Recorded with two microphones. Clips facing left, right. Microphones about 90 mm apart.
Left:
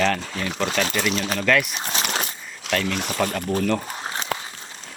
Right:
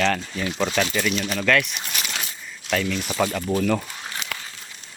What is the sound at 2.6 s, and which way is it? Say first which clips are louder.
Speech: even; 90° left.